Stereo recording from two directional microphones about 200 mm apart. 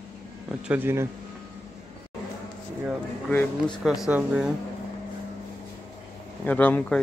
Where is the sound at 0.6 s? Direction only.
10° right (ahead or behind).